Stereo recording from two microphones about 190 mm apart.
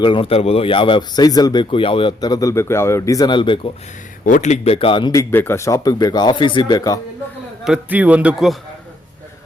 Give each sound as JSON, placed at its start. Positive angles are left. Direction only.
{"t": 0.0, "sound": "speech", "side_deg": 25}
{"t": 4.3, "sound": "speech", "side_deg": 40}
{"t": 5.3, "sound": "speech", "side_deg": 10}
{"t": 7.6, "sound": "a man's voice", "side_deg": -5}